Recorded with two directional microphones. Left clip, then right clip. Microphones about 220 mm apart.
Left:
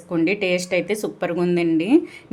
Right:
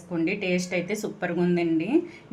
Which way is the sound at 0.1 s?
35° left (ahead or behind).